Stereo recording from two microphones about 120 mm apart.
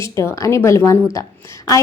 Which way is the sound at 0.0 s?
25° left (ahead or behind).